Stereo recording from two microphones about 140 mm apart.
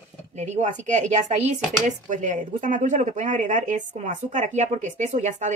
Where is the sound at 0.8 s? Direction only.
55° right (ahead or behind).